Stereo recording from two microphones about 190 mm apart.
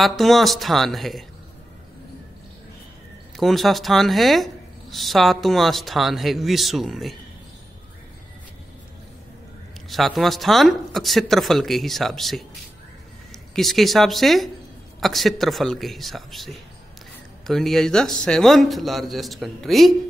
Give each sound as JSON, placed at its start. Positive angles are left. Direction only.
{"t": 0.0, "sound": "speech", "side_deg": 0}
{"t": 3.3, "sound": "speech", "side_deg": 0}
{"t": 9.8, "sound": "speech", "side_deg": 0}
{"t": 13.6, "sound": "speech", "side_deg": 0}